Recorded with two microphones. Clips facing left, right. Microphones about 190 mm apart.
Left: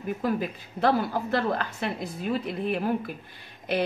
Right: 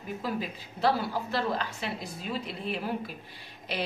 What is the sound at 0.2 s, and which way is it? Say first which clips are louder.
A woman's voice: left 5 dB; 50° left (ahead or behind).